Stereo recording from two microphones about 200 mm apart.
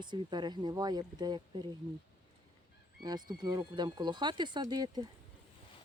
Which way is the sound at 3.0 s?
20° right (ahead or behind).